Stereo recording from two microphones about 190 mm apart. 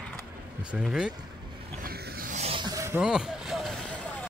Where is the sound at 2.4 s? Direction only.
25° right (ahead or behind).